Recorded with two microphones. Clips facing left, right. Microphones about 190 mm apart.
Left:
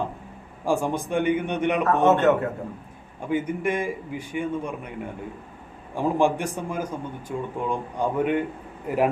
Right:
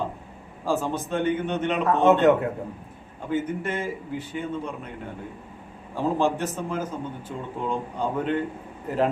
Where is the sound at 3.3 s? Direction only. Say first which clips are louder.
Left 2 dB; 10° left (ahead or behind).